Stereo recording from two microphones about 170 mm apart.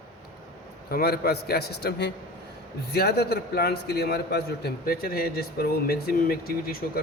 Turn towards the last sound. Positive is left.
turn(degrees=65)  # may be behind; listen again after turning